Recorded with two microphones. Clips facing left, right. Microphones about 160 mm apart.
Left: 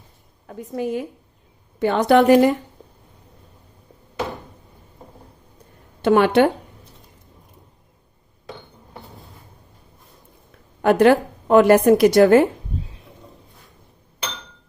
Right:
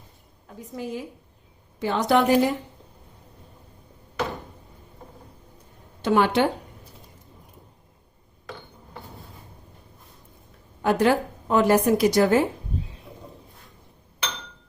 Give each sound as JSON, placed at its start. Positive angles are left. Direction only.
{"t": 0.4, "sound": "a woman's voice", "side_deg": 60}
{"t": 6.0, "sound": "a woman's voice", "side_deg": 60}
{"t": 10.8, "sound": "a woman's voice", "side_deg": 65}